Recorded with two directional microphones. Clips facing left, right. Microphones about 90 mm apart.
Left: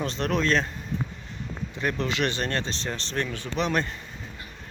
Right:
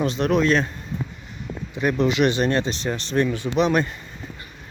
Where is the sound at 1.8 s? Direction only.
15° right (ahead or behind).